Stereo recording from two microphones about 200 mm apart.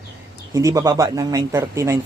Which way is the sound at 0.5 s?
15° right (ahead or behind).